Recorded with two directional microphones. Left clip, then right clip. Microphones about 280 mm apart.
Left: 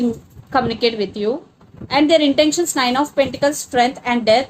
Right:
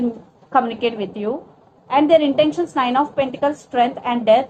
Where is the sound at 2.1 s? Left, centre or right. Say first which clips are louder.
Even; left.